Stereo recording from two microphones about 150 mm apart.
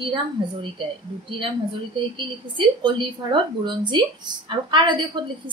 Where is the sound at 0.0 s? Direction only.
35° right (ahead or behind).